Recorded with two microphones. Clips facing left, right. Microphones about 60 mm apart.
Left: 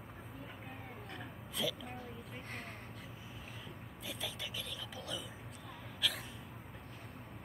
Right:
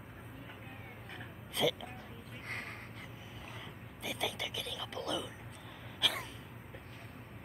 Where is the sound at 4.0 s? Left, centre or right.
Right.